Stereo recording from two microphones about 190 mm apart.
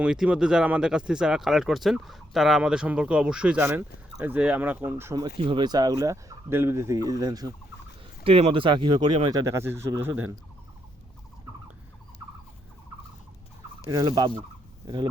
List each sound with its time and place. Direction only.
0.0 s speech: 5° right (ahead or behind)
5.5 s speech: 25° right (ahead or behind)
8.2 s speech: 30° right (ahead or behind); by 10.3 s 10° right (ahead or behind)
13.9 s speech: 20° right (ahead or behind)